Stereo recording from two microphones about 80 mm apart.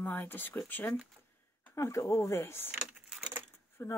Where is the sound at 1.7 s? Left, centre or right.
Left.